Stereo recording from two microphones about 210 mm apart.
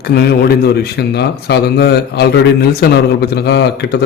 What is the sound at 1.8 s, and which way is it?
A man's voice, 50° left (ahead or behind).